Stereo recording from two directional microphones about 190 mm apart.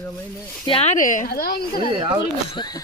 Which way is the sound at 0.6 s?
30° left (ahead or behind).